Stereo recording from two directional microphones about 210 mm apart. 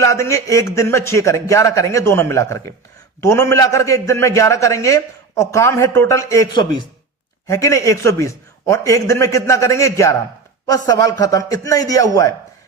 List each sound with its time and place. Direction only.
0.0 s a man's voice: 15° left (ahead or behind)